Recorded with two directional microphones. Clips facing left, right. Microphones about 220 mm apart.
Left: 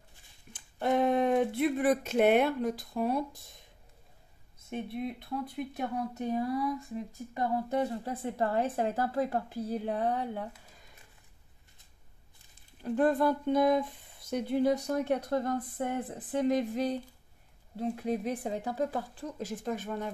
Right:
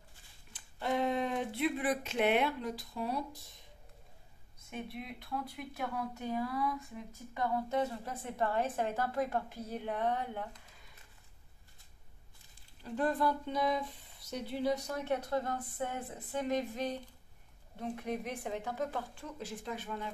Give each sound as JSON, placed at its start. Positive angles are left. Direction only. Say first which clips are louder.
{"t": 0.5, "sound": "speech", "louder": "left 6 dB", "side_deg": 50}
{"t": 4.9, "sound": "a woman's voice", "louder": "left 7 dB", "side_deg": 30}
{"t": 6.3, "sound": "a sound", "louder": "left 4 dB", "side_deg": 25}
{"t": 7.3, "sound": "a woman's voice", "louder": "left 3 dB", "side_deg": 35}
{"t": 12.8, "sound": "a woman's voice", "louder": "left 6 dB", "side_deg": 50}